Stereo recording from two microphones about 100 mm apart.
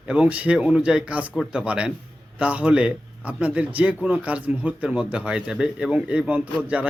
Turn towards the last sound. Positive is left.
turn(degrees=-15)  # may be behind; listen again after turning